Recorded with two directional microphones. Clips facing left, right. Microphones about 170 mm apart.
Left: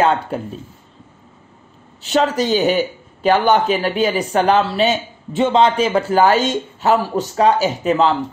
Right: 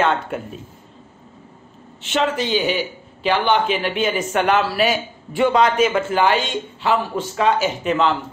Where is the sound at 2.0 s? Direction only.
40° left (ahead or behind).